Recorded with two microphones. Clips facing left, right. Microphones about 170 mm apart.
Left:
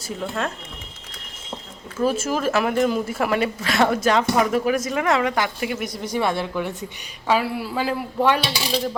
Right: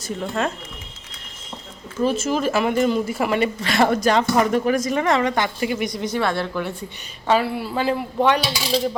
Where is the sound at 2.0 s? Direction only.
5° left (ahead or behind).